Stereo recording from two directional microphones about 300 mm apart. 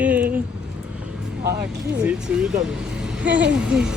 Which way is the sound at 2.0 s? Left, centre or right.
Centre.